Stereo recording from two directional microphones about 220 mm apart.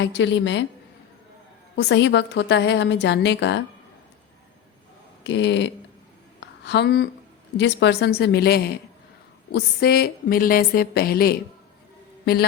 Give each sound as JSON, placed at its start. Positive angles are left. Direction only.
{"t": 0.0, "sound": "a woman's voice", "side_deg": 55}
{"t": 1.7, "sound": "a woman's voice", "side_deg": 50}
{"t": 5.2, "sound": "a woman's voice", "side_deg": 55}
{"t": 6.4, "sound": "a sound", "side_deg": 55}
{"t": 7.5, "sound": "a woman's voice", "side_deg": 55}